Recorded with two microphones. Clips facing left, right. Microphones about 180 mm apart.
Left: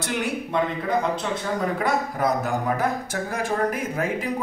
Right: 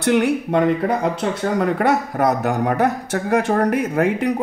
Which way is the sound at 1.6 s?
70° right (ahead or behind).